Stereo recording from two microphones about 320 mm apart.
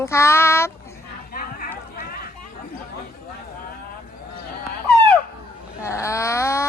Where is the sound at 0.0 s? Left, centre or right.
Centre.